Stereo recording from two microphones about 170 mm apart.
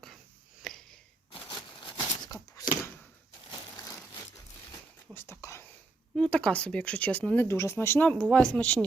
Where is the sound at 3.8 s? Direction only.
20° left (ahead or behind).